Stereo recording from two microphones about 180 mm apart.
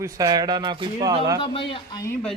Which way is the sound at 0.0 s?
20° right (ahead or behind).